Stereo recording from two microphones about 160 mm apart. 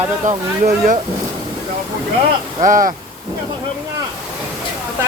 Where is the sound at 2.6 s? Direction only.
55° right (ahead or behind).